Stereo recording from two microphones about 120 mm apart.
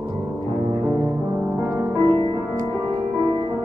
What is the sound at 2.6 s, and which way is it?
Music, 40° right (ahead or behind).